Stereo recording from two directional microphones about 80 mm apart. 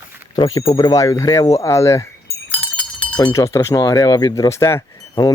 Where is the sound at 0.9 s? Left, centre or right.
Left.